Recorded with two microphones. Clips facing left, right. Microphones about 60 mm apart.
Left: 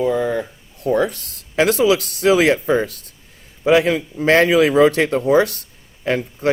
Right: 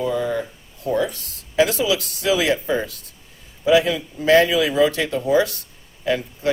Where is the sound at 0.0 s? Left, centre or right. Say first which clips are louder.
Left 3 dB; left.